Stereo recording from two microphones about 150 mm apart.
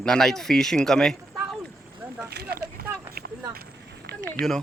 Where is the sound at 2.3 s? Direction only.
90° right.